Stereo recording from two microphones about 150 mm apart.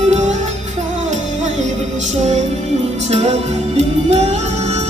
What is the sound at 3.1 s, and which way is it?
Music, 45° right (ahead or behind).